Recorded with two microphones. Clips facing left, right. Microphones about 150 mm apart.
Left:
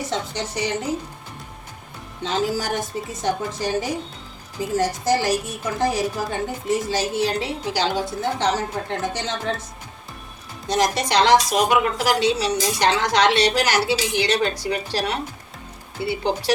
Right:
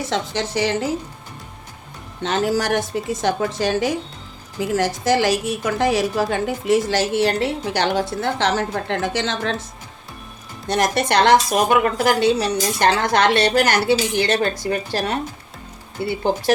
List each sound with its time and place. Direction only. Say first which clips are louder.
0.1 s a woman's voice: right 4 dB; 90° right
2.2 s a woman's voice: right 3 dB; 65° right (ahead or behind); by 9.6 s 90° right
10.7 s a woman's voice: right 2 dB; 60° right (ahead or behind)